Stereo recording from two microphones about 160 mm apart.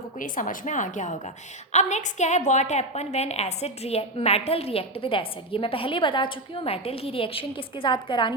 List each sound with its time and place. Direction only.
0.2 s a woman's voice: 55° left (ahead or behind); by 8.3 s 30° left (ahead or behind)